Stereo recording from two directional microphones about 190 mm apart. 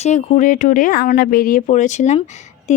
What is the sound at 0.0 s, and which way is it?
Speech, 40° left (ahead or behind).